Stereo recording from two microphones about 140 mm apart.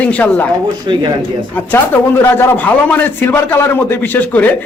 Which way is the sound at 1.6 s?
15° left (ahead or behind).